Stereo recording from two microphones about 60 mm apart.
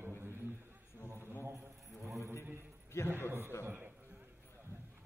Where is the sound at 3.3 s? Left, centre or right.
Right.